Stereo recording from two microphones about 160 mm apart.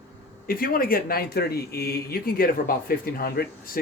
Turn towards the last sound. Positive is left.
turn(degrees=65)  # may be behind; listen again after turning